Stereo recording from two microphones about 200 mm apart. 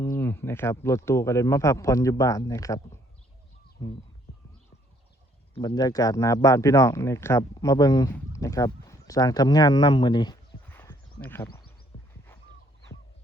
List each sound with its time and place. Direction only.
0.0 s speech: 10° left (ahead or behind)
5.5 s speech: 20° left (ahead or behind)
10.7 s a sound: 10° left (ahead or behind)